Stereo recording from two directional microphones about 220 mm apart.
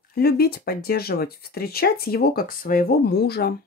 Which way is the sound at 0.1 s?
45° left (ahead or behind).